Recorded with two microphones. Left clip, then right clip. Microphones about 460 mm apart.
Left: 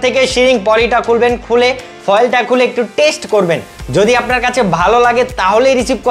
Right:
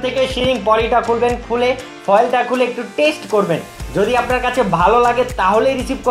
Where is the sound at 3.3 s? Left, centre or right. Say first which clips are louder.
Left 4 dB; left.